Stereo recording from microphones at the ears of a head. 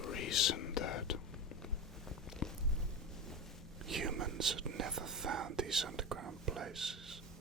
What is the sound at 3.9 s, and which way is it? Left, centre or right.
Whispering, right.